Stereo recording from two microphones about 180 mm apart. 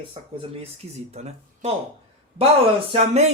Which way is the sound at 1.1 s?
35° right (ahead or behind).